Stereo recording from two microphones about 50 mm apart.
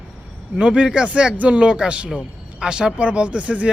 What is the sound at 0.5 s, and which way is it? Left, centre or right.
Speech, centre.